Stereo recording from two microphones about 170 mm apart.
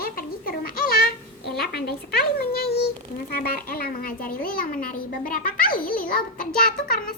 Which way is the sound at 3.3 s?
60° left (ahead or behind).